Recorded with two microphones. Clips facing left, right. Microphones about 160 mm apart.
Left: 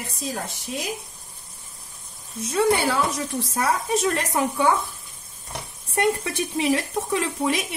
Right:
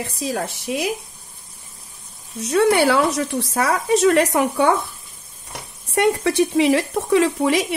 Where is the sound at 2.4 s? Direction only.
70° right (ahead or behind).